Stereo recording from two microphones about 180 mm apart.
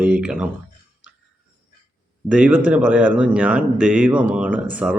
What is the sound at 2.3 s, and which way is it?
Speech, 5° right (ahead or behind).